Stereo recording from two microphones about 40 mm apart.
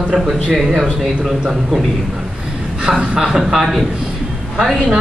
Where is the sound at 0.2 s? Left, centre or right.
Centre.